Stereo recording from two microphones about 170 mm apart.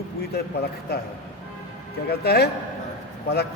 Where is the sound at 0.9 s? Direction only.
70° left (ahead or behind).